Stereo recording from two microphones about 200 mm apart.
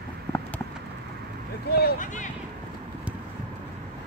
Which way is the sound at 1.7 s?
45° left (ahead or behind).